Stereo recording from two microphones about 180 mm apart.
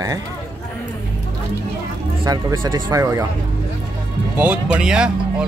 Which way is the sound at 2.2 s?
20° right (ahead or behind).